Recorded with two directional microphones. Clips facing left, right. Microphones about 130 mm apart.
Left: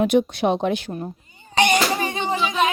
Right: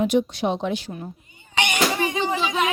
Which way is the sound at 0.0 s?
60° left (ahead or behind).